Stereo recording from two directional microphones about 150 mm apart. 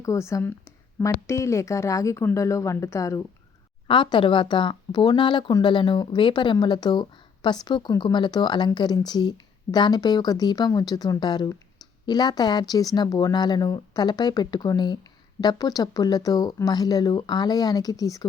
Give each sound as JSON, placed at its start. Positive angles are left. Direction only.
{"t": 0.0, "sound": "speech", "side_deg": 20}
{"t": 3.8, "sound": "speech", "side_deg": 35}